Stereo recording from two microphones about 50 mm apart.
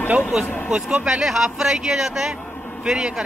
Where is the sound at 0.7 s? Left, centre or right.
Centre.